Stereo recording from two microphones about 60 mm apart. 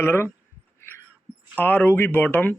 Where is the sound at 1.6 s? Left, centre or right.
Left.